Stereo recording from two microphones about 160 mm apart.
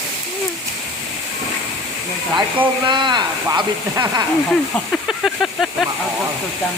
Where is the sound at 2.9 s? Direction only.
30° right (ahead or behind).